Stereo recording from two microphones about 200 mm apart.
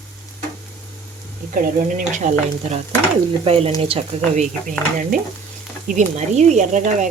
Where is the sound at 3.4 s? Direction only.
30° right (ahead or behind).